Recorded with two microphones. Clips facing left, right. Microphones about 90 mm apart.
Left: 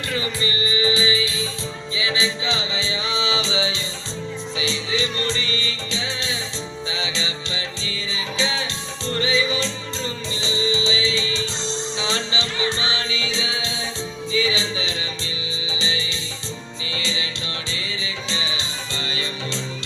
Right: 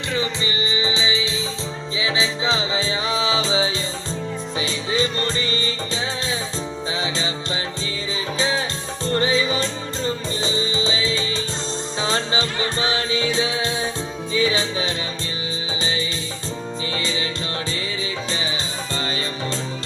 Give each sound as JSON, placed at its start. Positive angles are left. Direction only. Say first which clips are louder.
{"t": 0.7, "sound": "music", "louder": "left 4 dB", "side_deg": -25}
{"t": 18.3, "sound": "music", "louder": "left 1 dB", "side_deg": -45}